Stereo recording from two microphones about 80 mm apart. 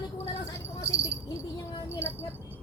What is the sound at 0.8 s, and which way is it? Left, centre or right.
Speech, left.